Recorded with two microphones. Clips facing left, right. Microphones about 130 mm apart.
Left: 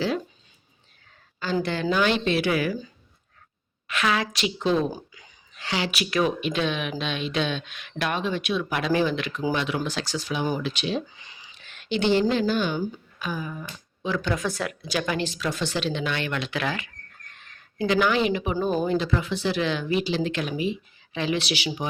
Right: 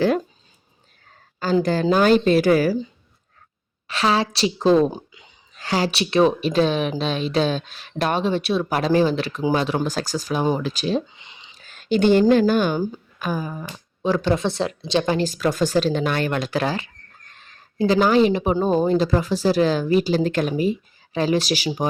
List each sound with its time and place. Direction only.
1.6 s a woman's voice: 40° right (ahead or behind)
3.8 s a woman's voice: 30° right (ahead or behind)
4.9 s a sound: 25° right (ahead or behind)
5.5 s a woman's voice: 40° right (ahead or behind)
11.1 s a sound: 25° right (ahead or behind)
11.5 s a woman's voice: 40° right (ahead or behind)